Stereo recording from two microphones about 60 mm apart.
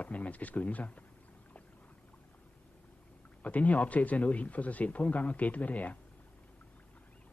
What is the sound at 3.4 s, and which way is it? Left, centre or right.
Speech, left.